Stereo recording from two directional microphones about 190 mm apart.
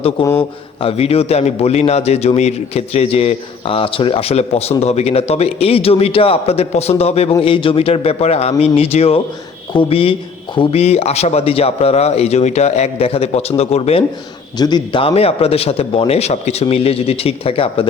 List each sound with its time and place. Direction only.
0.0 s a man's voice: 20° left (ahead or behind)
0.8 s a man's voice: 30° left (ahead or behind)